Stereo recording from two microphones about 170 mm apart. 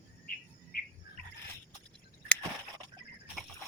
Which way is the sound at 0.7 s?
60° left (ahead or behind).